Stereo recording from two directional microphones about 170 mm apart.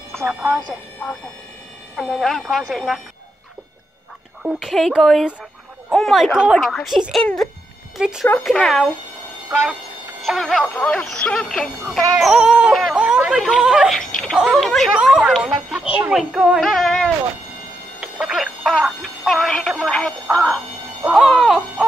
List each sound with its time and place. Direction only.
0.1 s speech: 10° right (ahead or behind)
1.0 s speech: 5° left (ahead or behind)
4.4 s speech: 5° right (ahead or behind)
9.5 s speech: 10° right (ahead or behind)
10.2 s speech: centre (ahead or behind)
20.2 s speech: 20° right (ahead or behind)
21.1 s speech: centre (ahead or behind)